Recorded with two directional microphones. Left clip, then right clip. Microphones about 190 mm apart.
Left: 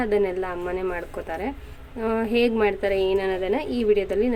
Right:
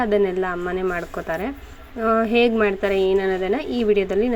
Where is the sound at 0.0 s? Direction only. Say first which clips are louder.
Right 3 dB; 10° right (ahead or behind).